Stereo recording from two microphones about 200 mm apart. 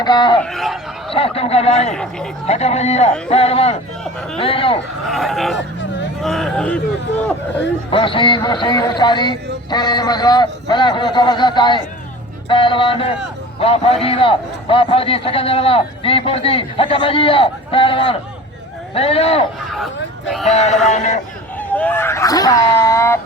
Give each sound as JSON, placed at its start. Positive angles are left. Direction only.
{"t": 0.0, "sound": "a man's voice", "side_deg": 20}
{"t": 0.5, "sound": "speech", "side_deg": 0}
{"t": 1.1, "sound": "a man's voice", "side_deg": 30}
{"t": 1.9, "sound": "a sound", "side_deg": 5}
{"t": 2.5, "sound": "a man's voice", "side_deg": 30}
{"t": 5.0, "sound": "a sound", "side_deg": 0}
{"t": 7.9, "sound": "a man's voice", "side_deg": 25}
{"t": 20.5, "sound": "a man's voice", "side_deg": 35}
{"t": 21.6, "sound": "speech", "side_deg": 10}